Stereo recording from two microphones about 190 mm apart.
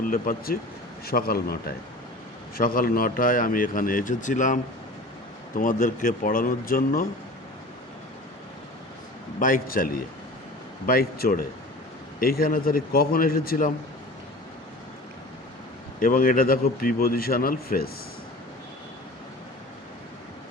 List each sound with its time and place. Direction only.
0.0 s a man's voice: 45° left (ahead or behind)
9.4 s a man's voice: 45° left (ahead or behind)
16.0 s a man's voice: 50° left (ahead or behind)